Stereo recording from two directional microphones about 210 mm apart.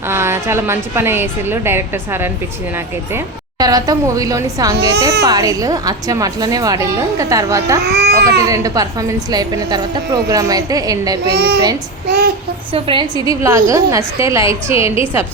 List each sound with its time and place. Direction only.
0.1 s a woman's voice: 10° right (ahead or behind)
7.8 s speech: 50° right (ahead or behind)
8.4 s a woman's voice: 15° right (ahead or behind)
11.3 s a child's voice: 50° right (ahead or behind)
12.7 s a woman's voice: 25° right (ahead or behind)